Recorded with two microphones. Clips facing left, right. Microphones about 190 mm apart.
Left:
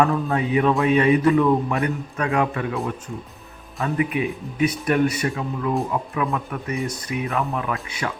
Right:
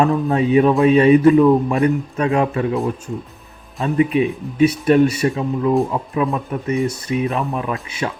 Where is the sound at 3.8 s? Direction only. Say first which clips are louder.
Right 6 dB; 25° right (ahead or behind).